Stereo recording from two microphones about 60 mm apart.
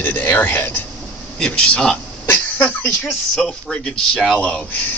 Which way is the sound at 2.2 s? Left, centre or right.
Left.